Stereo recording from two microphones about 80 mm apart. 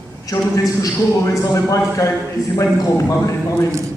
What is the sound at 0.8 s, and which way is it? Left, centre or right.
A man's voice, left.